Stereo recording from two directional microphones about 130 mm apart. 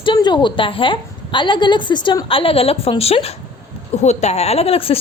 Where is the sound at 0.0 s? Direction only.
35° left (ahead or behind).